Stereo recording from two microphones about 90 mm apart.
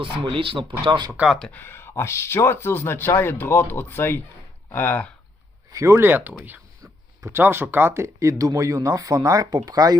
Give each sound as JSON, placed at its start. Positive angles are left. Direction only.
{"t": 0.0, "sound": "speech", "side_deg": -85}
{"t": 1.5, "sound": "speech", "side_deg": 25}
{"t": 5.7, "sound": "speech", "side_deg": -35}